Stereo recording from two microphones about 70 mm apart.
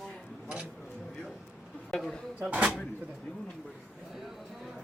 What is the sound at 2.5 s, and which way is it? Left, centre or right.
Speech, right.